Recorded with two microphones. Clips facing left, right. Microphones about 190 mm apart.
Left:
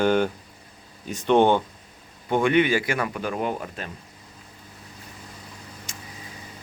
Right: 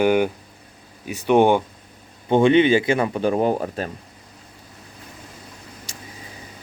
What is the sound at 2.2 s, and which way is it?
A man's voice, 25° right (ahead or behind).